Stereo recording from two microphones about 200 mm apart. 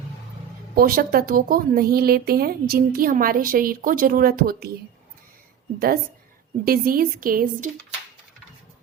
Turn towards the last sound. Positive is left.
turn(degrees=-45)  # may be behind; listen again after turning